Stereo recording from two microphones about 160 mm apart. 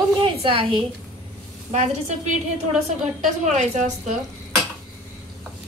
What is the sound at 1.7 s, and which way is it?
Speech, 45° right (ahead or behind).